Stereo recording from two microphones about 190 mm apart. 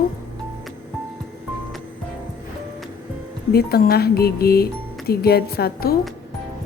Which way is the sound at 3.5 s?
55° left (ahead or behind).